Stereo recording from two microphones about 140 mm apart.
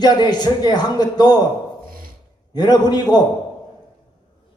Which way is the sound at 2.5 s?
30° left (ahead or behind).